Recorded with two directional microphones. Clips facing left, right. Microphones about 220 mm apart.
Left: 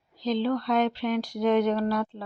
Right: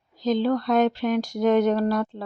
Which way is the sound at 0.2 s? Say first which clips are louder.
Right 4 dB; 45° right (ahead or behind).